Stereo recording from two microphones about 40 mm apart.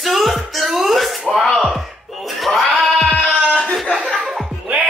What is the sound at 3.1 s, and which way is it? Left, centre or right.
Music, left.